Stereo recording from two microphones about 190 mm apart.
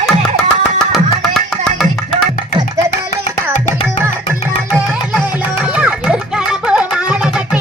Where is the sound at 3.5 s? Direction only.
40° left (ahead or behind).